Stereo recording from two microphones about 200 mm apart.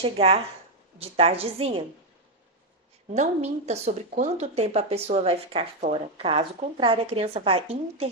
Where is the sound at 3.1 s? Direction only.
35° right (ahead or behind).